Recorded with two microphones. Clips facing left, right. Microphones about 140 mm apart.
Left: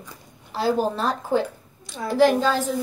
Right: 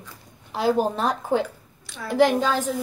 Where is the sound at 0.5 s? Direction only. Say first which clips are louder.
Right 1 dB; 15° right (ahead or behind).